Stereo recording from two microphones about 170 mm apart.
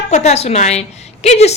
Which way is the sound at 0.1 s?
40° left (ahead or behind).